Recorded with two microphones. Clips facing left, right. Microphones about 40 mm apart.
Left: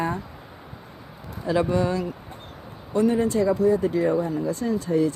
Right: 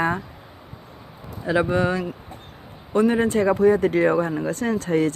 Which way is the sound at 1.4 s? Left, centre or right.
Right.